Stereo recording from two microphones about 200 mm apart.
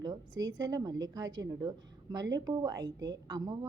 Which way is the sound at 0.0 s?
20° right (ahead or behind).